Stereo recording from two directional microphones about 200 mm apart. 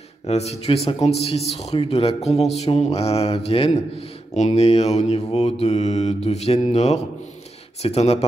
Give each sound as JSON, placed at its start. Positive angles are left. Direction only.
{"t": 0.3, "sound": "speech", "side_deg": 30}